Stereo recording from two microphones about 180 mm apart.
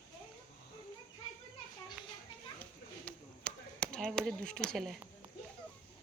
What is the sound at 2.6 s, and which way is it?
Chop, 5° left (ahead or behind).